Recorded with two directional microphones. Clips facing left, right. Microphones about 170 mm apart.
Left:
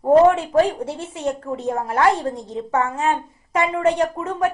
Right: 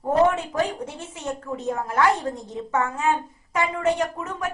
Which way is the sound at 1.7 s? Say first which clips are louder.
Left 3 dB; 35° left (ahead or behind).